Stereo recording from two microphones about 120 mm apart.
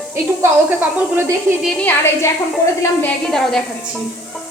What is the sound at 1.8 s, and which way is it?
Speech, 20° left (ahead or behind).